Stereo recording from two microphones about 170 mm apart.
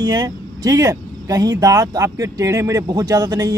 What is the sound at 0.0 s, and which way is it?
Speech, 20° right (ahead or behind).